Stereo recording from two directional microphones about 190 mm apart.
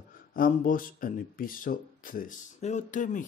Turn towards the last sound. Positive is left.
turn(degrees=40)  # may be behind; listen again after turning